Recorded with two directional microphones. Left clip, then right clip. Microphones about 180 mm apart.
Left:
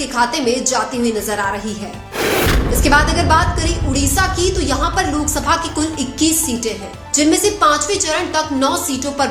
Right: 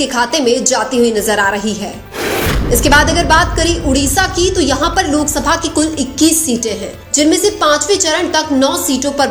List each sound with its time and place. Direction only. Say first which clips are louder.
0.0 s a woman's voice: right 3 dB; 30° right (ahead or behind)
2.2 s music: even; centre (ahead or behind)
2.8 s a woman's voice: right 3 dB; 35° right (ahead or behind)